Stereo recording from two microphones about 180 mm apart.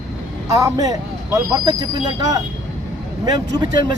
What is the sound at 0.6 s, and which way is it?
Speech, 20° right (ahead or behind).